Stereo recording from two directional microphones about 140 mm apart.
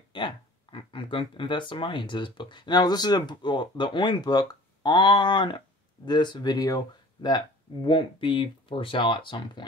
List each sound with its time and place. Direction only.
0.1 s speech: 35° left (ahead or behind)